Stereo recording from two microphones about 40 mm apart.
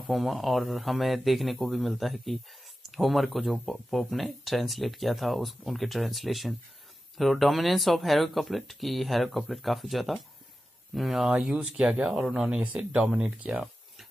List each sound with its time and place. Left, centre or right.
0.0 s speech: centre
11.6 s speech: centre
12.9 s speech: right